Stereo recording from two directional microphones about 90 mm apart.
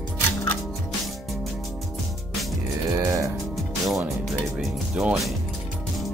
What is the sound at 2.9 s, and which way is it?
Music, 40° right (ahead or behind).